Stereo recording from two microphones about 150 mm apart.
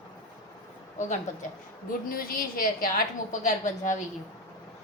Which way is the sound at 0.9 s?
55° left (ahead or behind).